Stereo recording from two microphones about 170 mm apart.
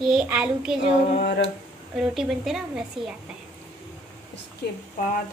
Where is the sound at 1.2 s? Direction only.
70° left (ahead or behind).